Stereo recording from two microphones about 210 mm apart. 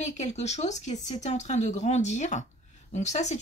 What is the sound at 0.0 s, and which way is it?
Speech, 35° left (ahead or behind).